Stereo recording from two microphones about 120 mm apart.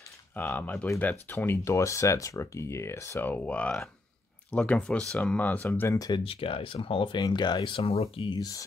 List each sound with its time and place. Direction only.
0.4 s speech: 15° left (ahead or behind)
5.9 s speech: 35° left (ahead or behind)
6.2 s speech: 50° left (ahead or behind)
8.3 s speech: 30° left (ahead or behind)